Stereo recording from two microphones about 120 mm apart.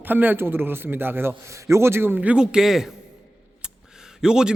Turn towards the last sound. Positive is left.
turn(degrees=-5)  # may be behind; listen again after turning